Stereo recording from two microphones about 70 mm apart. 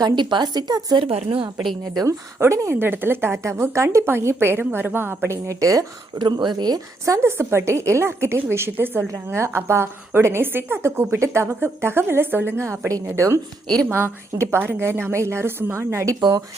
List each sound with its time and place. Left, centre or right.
0.0 s a woman's voice: right
2.4 s a woman's voice: right
5.5 s speech: right
6.2 s speech: right
7.0 s a woman's voice: right